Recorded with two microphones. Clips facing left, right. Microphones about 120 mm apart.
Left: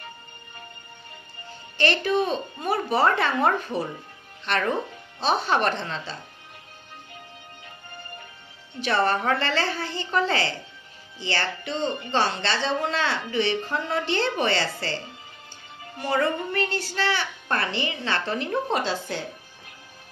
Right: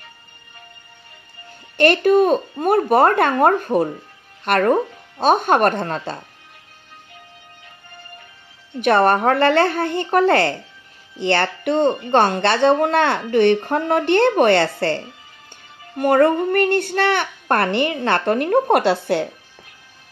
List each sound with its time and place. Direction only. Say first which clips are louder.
1.8 s speech: right 9 dB; 55° right (ahead or behind)
8.8 s speech: right 8 dB; 55° right (ahead or behind)
16.0 s speech: right 10 dB; 55° right (ahead or behind)